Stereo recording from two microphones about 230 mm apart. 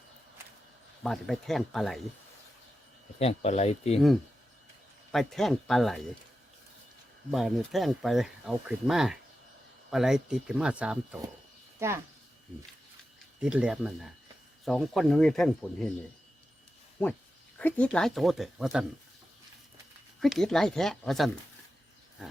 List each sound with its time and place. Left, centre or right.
1.0 s speech: centre
3.2 s speech: left
5.1 s speech: centre
7.3 s speech: centre
13.4 s speech: centre
17.6 s speech: centre
20.2 s speech: centre